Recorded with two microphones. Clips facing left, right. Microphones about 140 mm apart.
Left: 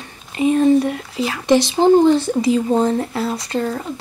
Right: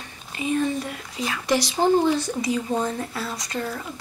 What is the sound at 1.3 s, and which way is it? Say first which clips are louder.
Speech: left 8 dB; 25° left (ahead or behind).